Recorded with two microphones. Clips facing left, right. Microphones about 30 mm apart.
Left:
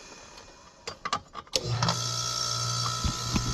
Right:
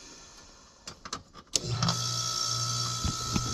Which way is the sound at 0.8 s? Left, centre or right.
Left.